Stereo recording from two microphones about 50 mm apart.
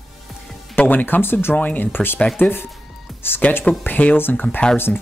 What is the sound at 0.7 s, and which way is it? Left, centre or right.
Speech, left.